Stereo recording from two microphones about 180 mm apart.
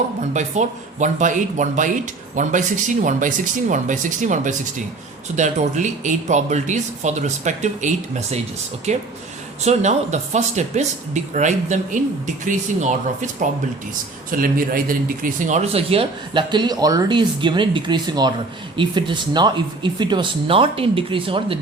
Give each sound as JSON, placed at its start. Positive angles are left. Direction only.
{"t": 0.3, "sound": "speech", "side_deg": -40}
{"t": 14.3, "sound": "a man's voice", "side_deg": -50}